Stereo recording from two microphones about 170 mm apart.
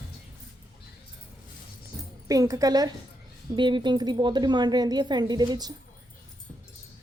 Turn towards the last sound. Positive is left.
turn(degrees=-25)  # may be behind; listen again after turning